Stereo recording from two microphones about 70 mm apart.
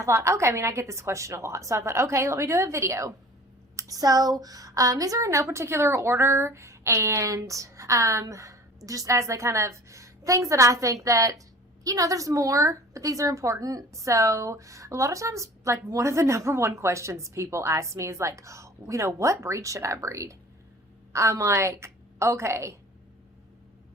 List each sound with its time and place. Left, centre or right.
0.0 s a woman's voice: right
3.8 s a woman's voice: right